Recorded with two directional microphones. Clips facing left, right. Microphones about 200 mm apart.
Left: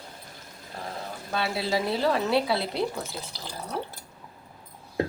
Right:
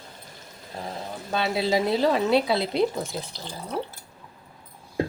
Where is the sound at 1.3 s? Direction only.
20° right (ahead or behind).